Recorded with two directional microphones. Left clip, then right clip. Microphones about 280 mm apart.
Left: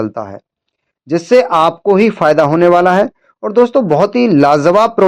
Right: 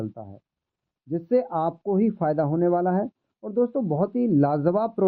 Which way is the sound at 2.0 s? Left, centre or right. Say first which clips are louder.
Left 13 dB; centre.